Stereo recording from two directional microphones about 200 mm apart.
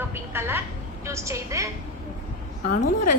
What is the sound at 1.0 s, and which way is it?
Speech, 15° right (ahead or behind).